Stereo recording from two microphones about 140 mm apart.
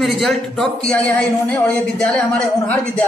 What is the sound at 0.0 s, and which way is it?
A man's voice, centre (ahead or behind).